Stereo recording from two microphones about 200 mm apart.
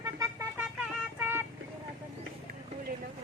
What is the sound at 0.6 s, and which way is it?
Vehicle, 10° right (ahead or behind).